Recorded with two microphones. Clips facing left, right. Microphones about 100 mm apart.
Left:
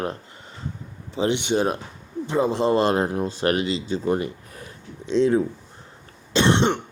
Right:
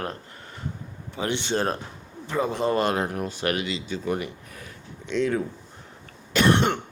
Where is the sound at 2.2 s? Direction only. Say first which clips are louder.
Left 4 dB; 25° left (ahead or behind).